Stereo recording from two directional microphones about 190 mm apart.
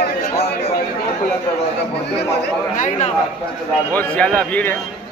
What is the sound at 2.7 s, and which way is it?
Speech, 40° left (ahead or behind).